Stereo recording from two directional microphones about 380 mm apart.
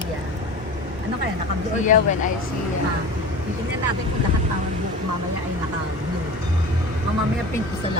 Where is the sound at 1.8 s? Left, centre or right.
Centre.